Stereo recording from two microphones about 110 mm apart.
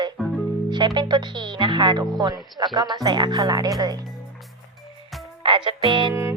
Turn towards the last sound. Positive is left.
turn(degrees=-25)  # may be behind; listen again after turning